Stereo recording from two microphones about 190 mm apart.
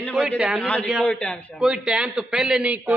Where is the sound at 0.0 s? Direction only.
5° left (ahead or behind).